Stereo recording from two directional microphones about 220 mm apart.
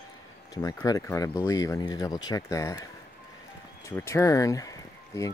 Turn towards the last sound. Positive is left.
turn(degrees=15)  # may be behind; listen again after turning